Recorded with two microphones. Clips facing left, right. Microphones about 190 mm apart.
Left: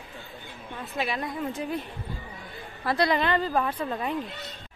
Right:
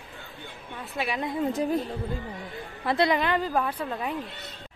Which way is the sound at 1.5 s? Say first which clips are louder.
Right 5 dB; 40° right (ahead or behind).